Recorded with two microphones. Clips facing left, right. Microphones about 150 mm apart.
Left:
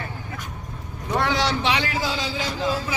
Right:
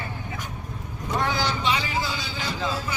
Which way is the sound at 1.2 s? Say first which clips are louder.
Left 3 dB; 80° left.